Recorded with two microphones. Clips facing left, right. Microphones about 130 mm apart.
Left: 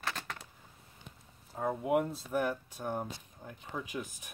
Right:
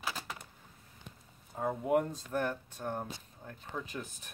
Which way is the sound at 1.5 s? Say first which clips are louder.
Even; centre (ahead or behind).